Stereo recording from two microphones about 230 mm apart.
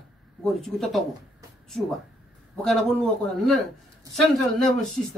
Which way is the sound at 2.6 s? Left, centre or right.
Centre.